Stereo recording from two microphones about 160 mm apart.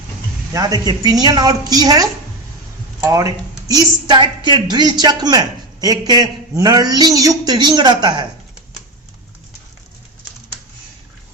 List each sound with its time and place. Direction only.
0.5 s a woman's voice: 25° right (ahead or behind)